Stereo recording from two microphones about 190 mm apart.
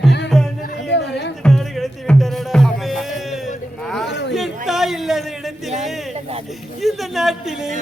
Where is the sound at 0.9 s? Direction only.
65° left (ahead or behind).